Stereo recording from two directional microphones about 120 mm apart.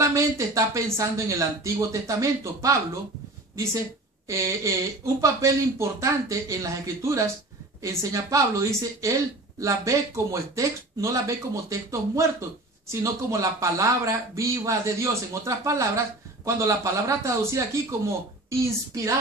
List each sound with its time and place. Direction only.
0.0 s speech: 25° right (ahead or behind)
4.3 s speech: 25° right (ahead or behind)